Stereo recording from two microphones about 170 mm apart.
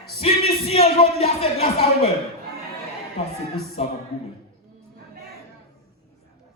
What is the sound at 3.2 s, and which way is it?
Music, 40° left (ahead or behind).